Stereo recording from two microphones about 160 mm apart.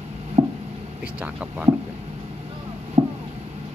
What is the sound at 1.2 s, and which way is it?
Speech, 10° right (ahead or behind).